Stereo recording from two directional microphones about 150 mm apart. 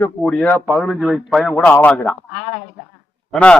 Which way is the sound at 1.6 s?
10° left (ahead or behind).